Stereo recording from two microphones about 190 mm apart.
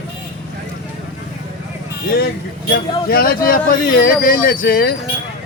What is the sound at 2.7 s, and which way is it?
Speech, 50° left (ahead or behind).